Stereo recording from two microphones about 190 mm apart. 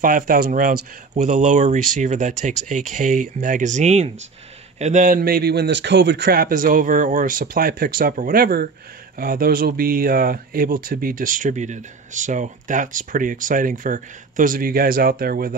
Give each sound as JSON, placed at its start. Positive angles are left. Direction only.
{"t": 0.0, "sound": "speech", "side_deg": -45}